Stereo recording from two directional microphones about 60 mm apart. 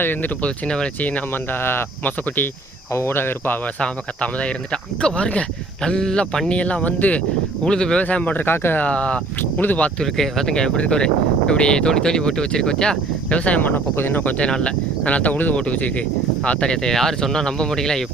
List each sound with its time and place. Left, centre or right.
0.0 s speech: left
0.4 s speech: centre
1.3 s speech: left
2.9 s speech: left
3.8 s speech: left
6.5 s speech: centre
8.0 s speech: left
8.8 s speech: centre
9.4 s speech: left
10.0 s speech: centre